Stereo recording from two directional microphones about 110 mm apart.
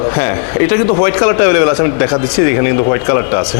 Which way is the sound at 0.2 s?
15° left (ahead or behind).